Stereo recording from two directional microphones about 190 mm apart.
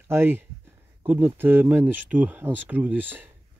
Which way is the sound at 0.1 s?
10° right (ahead or behind).